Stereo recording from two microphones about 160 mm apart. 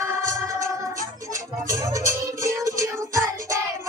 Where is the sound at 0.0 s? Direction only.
15° right (ahead or behind).